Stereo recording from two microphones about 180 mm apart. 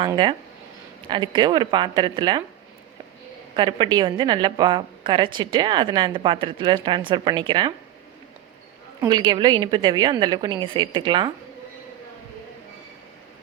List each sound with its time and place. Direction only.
0.0 s a woman's voice: 25° right (ahead or behind)
3.5 s a woman's voice: 25° right (ahead or behind)
9.0 s a woman's voice: 25° right (ahead or behind)